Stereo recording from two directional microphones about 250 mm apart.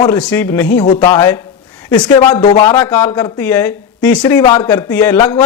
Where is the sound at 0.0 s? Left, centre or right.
Centre.